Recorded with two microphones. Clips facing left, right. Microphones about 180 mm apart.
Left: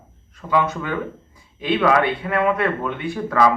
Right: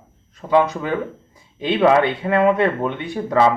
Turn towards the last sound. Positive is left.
turn(degrees=-20)  # may be behind; listen again after turning